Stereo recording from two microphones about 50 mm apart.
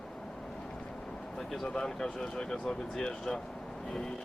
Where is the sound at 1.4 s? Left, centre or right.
Centre.